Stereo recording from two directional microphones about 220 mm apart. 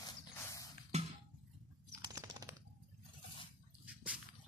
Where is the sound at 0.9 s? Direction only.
30° right (ahead or behind).